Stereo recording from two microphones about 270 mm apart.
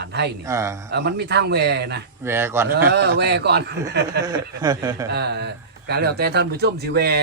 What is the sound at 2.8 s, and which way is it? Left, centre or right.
Speech, right.